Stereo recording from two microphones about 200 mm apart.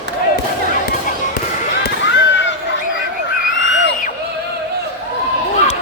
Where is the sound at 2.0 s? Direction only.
65° left (ahead or behind).